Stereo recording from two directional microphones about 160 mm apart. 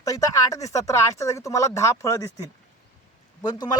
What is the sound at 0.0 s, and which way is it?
Speech, 20° left (ahead or behind).